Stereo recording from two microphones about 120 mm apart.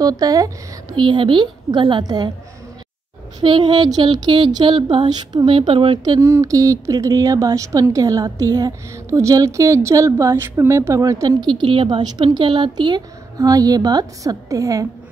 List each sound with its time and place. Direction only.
0.0 s speech: 30° right (ahead or behind)
3.3 s speech: 40° right (ahead or behind)
6.0 s a woman's voice: 30° right (ahead or behind)
11.4 s speech: 40° right (ahead or behind)